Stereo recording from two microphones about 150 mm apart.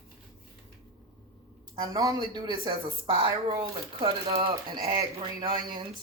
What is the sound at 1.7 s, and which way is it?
Speech, 25° right (ahead or behind).